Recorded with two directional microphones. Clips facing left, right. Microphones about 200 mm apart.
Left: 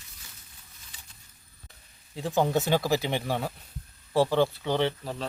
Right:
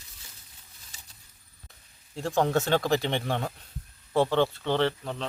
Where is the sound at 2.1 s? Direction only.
Centre (ahead or behind).